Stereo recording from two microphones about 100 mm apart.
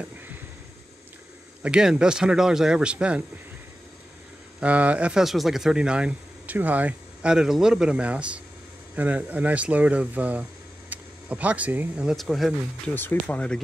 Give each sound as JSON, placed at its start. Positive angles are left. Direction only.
{"t": 1.6, "sound": "speech", "side_deg": -5}
{"t": 4.6, "sound": "speech", "side_deg": -15}
{"t": 12.2, "sound": "speech", "side_deg": 0}
{"t": 12.9, "sound": "speech", "side_deg": 20}